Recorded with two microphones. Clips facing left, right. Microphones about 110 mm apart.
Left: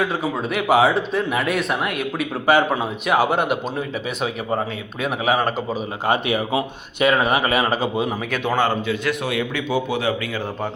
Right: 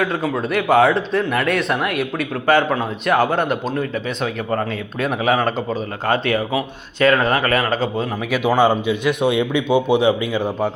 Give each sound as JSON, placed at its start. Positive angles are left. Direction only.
{"t": 0.0, "sound": "speech", "side_deg": 5}
{"t": 6.1, "sound": "speech", "side_deg": 15}
{"t": 8.3, "sound": "a man's voice", "side_deg": -10}